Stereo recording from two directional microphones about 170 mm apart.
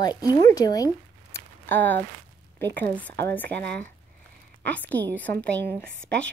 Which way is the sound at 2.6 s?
85° right.